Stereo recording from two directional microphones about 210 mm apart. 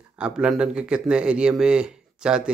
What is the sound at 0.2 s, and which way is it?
Speech, 5° right (ahead or behind).